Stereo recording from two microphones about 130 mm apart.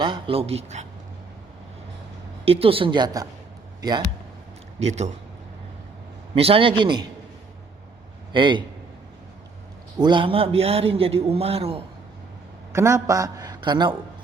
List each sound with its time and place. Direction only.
0.0 s a man's voice: 40° right (ahead or behind); by 0.9 s 55° right (ahead or behind)
2.4 s a man's voice: 45° right (ahead or behind)
4.8 s speech: 55° right (ahead or behind)
6.3 s speech: 45° right (ahead or behind)
8.3 s a man's voice: 40° right (ahead or behind)
10.0 s a man's voice: 40° right (ahead or behind)
12.7 s a man's voice: 20° right (ahead or behind)